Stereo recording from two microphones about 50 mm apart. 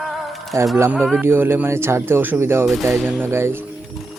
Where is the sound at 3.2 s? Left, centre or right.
Right.